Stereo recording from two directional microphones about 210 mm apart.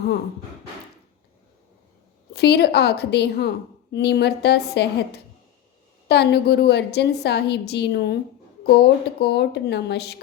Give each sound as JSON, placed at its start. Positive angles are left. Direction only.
{"t": 2.3, "sound": "a woman's voice", "side_deg": 50}